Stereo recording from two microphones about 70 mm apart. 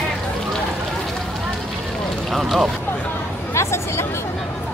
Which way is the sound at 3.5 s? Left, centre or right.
Left.